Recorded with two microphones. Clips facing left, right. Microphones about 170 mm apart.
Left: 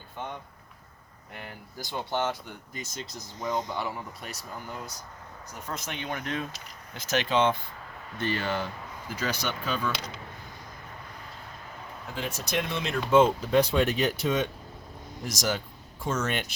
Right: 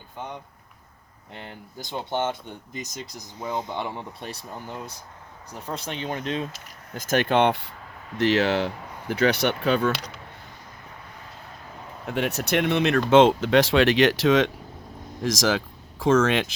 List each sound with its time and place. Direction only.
1.3 s speech: 25° right (ahead or behind); by 3.7 s 10° right (ahead or behind)
3.7 s speech: 25° right (ahead or behind)
5.5 s speech: 30° right (ahead or behind)
6.9 s speech: 50° right (ahead or behind); by 7.7 s 70° right (ahead or behind)
8.2 s speech: 85° right
12.0 s speech: 70° right (ahead or behind); by 16.6 s 90° right